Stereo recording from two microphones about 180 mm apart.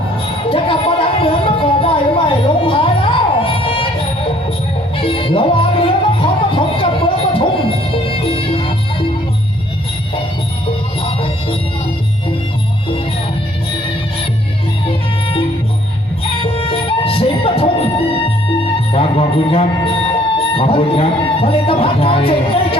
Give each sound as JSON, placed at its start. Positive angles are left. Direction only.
{"t": 0.4, "sound": "a sound", "side_deg": 30}
{"t": 4.9, "sound": "music", "side_deg": 30}
{"t": 14.8, "sound": "music", "side_deg": 30}